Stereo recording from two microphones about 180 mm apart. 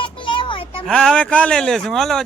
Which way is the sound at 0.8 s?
5° left (ahead or behind).